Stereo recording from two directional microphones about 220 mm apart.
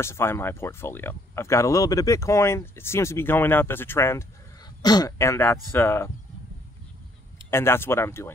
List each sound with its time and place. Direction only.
0.0 s speech: 10° left (ahead or behind)
7.5 s speech: 10° left (ahead or behind)